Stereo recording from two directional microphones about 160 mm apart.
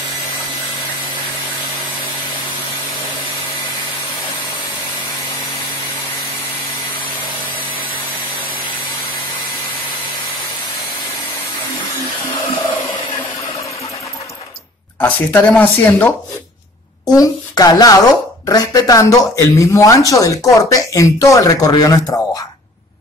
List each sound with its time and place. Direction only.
15.0 s speech: 10° left (ahead or behind)
17.0 s speech: 25° left (ahead or behind)